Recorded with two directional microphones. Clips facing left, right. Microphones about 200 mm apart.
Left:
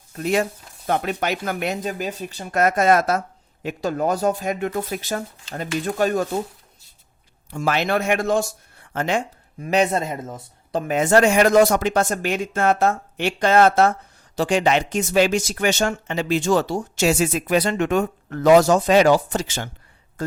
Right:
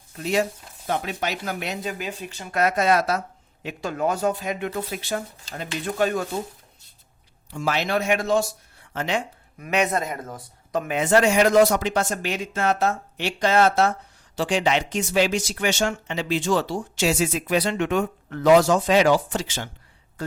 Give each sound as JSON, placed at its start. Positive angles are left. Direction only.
{"t": 0.2, "sound": "speech", "side_deg": 55}
{"t": 7.5, "sound": "speech", "side_deg": 55}
{"t": 9.6, "sound": "speech", "side_deg": 30}
{"t": 10.9, "sound": "speech", "side_deg": 45}